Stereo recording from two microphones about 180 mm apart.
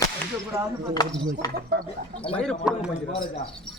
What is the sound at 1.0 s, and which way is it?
Speech, 20° left (ahead or behind).